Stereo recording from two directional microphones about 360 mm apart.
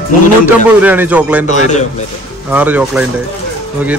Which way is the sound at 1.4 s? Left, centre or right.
Centre.